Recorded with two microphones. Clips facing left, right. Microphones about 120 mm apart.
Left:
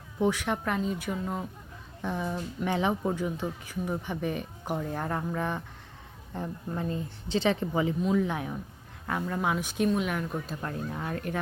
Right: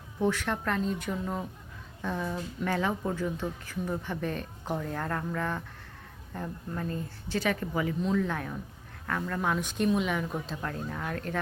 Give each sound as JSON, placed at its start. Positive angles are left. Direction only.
{"t": 0.2, "sound": "speech", "side_deg": 15}
{"t": 2.0, "sound": "a woman's voice", "side_deg": 15}